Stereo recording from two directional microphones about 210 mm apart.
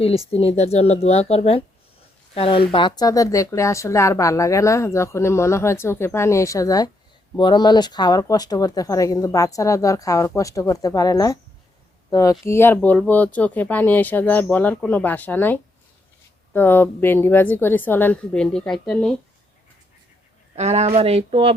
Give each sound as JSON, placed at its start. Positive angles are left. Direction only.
{"t": 0.3, "sound": "speech", "side_deg": 30}
{"t": 20.6, "sound": "speech", "side_deg": -30}